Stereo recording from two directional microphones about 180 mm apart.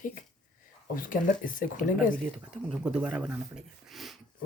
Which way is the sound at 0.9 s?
50° left (ahead or behind).